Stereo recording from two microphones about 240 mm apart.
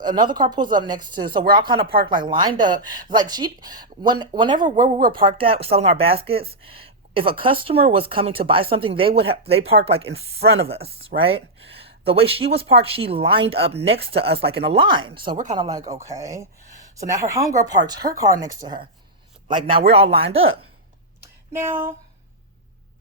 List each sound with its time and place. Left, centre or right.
0.0 s speech: centre
19.9 s speech: right
20.4 s speech: right
21.5 s speech: centre